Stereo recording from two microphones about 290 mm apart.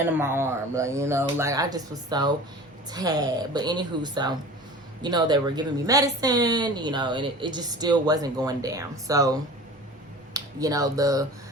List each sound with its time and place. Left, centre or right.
0.0 s a woman's voice: centre